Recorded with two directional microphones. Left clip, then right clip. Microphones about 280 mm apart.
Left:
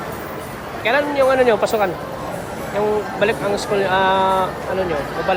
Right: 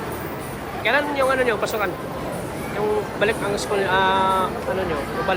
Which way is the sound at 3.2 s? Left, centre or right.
Centre.